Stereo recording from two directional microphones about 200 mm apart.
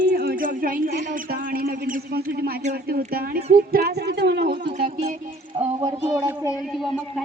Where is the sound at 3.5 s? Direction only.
50° right (ahead or behind).